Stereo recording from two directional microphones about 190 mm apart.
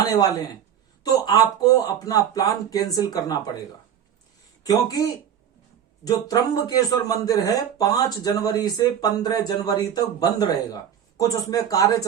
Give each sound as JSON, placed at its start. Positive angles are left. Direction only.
{"t": 1.0, "sound": "speech", "side_deg": 20}
{"t": 4.6, "sound": "speech", "side_deg": 20}
{"t": 6.1, "sound": "speech", "side_deg": 20}